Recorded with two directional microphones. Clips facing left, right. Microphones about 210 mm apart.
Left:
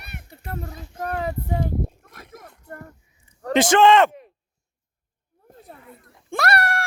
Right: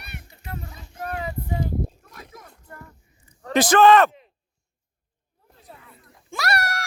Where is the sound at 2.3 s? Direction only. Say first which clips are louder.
Left 4 dB; 50° left (ahead or behind).